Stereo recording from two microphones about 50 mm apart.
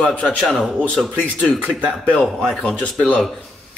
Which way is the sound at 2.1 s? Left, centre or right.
Centre.